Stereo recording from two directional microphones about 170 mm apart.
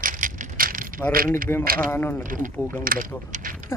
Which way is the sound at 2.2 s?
50° right (ahead or behind).